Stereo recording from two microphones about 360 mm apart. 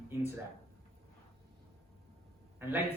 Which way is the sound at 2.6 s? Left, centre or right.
Centre.